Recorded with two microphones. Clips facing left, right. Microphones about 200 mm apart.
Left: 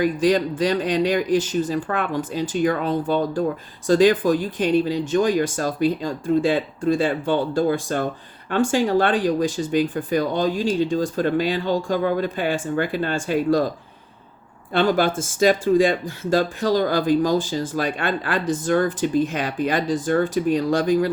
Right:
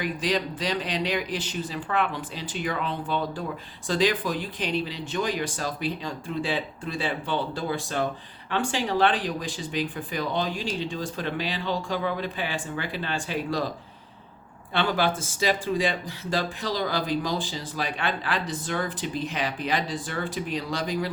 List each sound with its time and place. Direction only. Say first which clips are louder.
0.0 s speech: left 9 dB; 45° left (ahead or behind)
14.7 s speech: left 6 dB; 45° left (ahead or behind)